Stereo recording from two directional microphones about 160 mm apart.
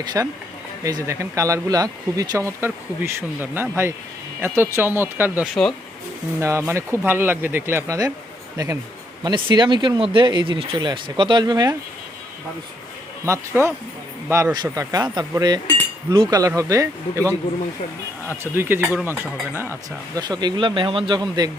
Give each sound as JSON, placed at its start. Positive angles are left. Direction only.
{"t": 0.0, "sound": "speech", "side_deg": -25}
{"t": 13.2, "sound": "speech", "side_deg": -15}
{"t": 18.5, "sound": "speech", "side_deg": -15}
{"t": 20.1, "sound": "speech", "side_deg": -25}